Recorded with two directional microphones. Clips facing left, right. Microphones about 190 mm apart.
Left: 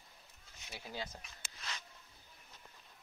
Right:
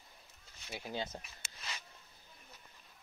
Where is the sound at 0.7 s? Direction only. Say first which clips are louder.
Right 4 dB; 25° right (ahead or behind).